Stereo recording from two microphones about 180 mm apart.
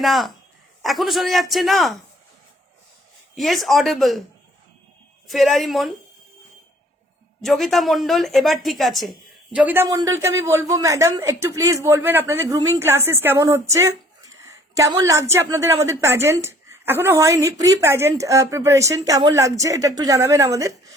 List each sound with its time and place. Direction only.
0.0 s a man's voice: centre (ahead or behind)
3.3 s a man's voice: centre (ahead or behind)
5.3 s a man's voice: centre (ahead or behind)
7.4 s speech: centre (ahead or behind); by 20.7 s 15° right (ahead or behind)